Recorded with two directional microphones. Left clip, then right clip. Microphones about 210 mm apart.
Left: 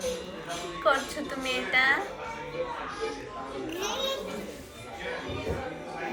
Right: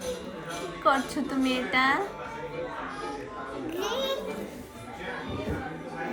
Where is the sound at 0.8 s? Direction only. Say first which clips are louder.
Right 1 dB; 20° right (ahead or behind).